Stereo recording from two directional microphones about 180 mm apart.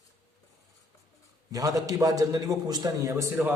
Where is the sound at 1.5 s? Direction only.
20° right (ahead or behind).